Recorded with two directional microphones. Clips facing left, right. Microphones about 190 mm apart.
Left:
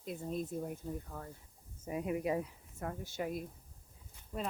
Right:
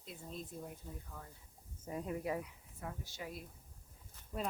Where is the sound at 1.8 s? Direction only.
10° left (ahead or behind).